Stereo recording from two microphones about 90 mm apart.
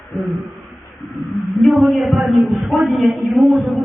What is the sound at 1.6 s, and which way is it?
A man's voice, centre (ahead or behind).